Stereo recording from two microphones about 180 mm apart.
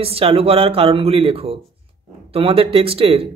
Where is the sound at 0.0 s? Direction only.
30° right (ahead or behind).